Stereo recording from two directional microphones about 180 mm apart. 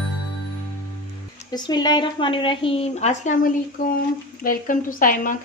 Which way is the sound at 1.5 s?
25° left (ahead or behind).